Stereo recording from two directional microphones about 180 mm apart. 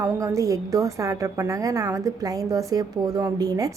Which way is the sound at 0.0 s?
15° right (ahead or behind).